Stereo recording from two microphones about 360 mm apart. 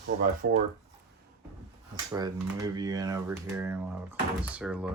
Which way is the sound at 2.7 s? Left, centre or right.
Centre.